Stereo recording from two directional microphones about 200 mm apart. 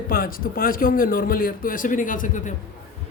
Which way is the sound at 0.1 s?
45° left (ahead or behind).